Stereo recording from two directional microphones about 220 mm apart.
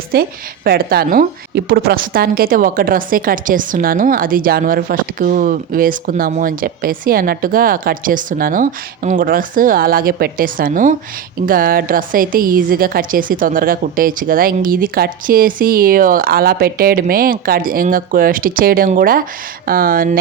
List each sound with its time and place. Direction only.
0.1 s a woman's voice: 45° right (ahead or behind)